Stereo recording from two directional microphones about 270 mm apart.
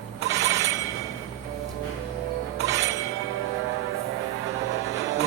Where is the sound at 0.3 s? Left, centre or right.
Centre.